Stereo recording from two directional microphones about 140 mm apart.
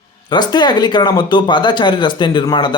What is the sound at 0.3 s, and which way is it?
Speech, 30° left (ahead or behind).